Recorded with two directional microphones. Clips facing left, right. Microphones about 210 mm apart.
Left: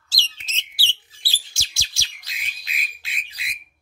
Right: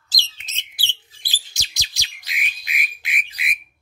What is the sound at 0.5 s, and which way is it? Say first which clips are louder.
Bird: left 2 dB; 15° right (ahead or behind).